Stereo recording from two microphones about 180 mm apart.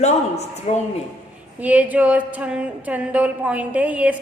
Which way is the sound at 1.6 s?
10° right (ahead or behind).